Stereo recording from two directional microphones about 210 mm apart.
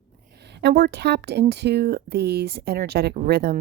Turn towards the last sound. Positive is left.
turn(degrees=-45)  # may be behind; listen again after turning